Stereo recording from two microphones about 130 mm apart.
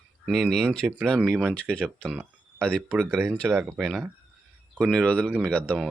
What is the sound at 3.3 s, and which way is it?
A man's voice, 10° right (ahead or behind).